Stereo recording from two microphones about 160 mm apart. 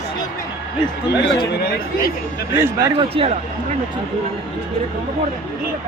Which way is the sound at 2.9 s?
35° right (ahead or behind).